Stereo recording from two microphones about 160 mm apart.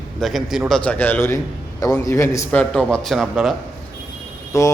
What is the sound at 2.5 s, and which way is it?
Speech, 5° left (ahead or behind).